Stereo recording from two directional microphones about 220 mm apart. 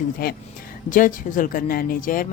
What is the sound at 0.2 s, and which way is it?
A woman's voice, 45° left (ahead or behind).